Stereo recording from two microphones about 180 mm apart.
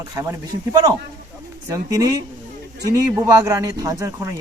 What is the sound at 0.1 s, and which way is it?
Speech, 20° right (ahead or behind).